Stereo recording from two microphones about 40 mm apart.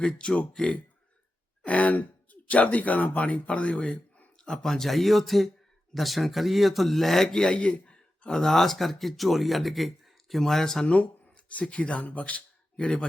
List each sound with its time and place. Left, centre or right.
0.0 s speech: left
1.6 s speech: left
4.4 s speech: centre
7.4 s a sound: left
8.3 s speech: centre
10.8 s speech: left
12.7 s speech: left